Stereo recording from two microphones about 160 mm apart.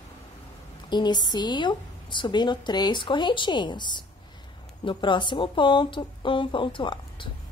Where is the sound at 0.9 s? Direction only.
25° left (ahead or behind).